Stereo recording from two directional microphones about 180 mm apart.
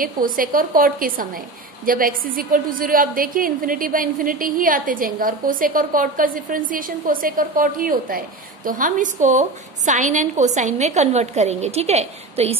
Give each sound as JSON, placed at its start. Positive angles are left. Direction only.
{"t": 0.0, "sound": "a woman's voice", "side_deg": -50}